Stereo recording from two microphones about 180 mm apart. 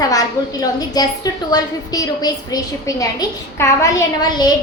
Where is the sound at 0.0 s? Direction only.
20° left (ahead or behind).